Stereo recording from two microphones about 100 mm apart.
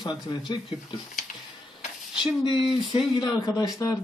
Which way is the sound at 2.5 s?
50° left (ahead or behind).